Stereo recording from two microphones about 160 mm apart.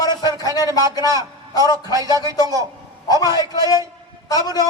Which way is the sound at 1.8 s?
20° right (ahead or behind).